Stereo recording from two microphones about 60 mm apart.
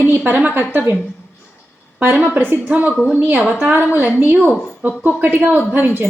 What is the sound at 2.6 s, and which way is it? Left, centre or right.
A woman's voice, right.